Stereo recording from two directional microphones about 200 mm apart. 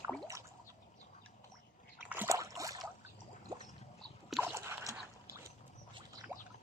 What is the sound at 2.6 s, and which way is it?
Boat, 15° right (ahead or behind).